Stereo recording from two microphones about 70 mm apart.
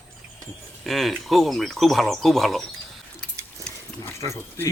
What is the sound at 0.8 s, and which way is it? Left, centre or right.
Speech, centre.